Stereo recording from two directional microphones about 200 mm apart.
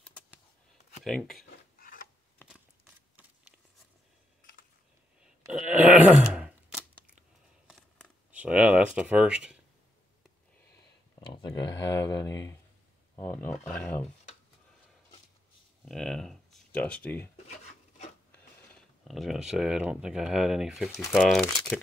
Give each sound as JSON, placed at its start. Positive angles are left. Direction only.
{"t": 1.0, "sound": "speech", "side_deg": 0}
{"t": 1.8, "sound": "a sound", "side_deg": 45}
{"t": 5.5, "sound": "groan", "side_deg": -5}
{"t": 6.3, "sound": "scissors", "side_deg": -5}
{"t": 7.6, "sound": "a sound", "side_deg": 0}
{"t": 11.1, "sound": "a sound", "side_deg": 25}
{"t": 11.9, "sound": "speech", "side_deg": 15}
{"t": 15.8, "sound": "speech", "side_deg": 0}
{"t": 18.7, "sound": "speech", "side_deg": 0}